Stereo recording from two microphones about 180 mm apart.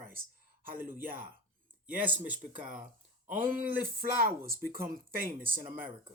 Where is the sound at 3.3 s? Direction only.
50° right (ahead or behind).